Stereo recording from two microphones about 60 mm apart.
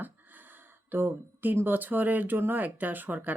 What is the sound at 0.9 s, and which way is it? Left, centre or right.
Speech, right.